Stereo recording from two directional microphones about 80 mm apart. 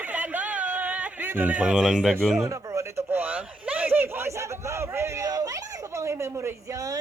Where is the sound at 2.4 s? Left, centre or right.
Right.